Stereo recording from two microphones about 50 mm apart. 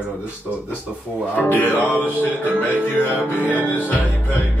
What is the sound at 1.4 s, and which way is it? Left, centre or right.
Music, left.